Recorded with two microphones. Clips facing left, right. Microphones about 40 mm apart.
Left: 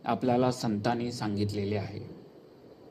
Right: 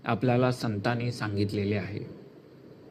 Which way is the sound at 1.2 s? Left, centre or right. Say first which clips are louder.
Right 2 dB; right.